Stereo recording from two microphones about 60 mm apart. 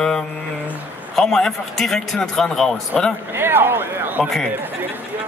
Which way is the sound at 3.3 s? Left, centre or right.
Right.